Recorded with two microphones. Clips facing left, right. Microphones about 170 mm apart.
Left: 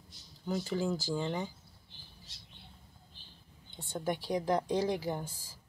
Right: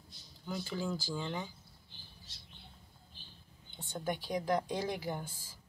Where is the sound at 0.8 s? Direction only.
20° left (ahead or behind).